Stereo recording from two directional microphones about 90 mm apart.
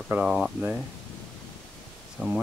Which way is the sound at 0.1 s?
10° right (ahead or behind).